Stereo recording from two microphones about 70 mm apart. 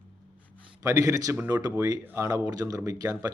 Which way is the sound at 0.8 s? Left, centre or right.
Right.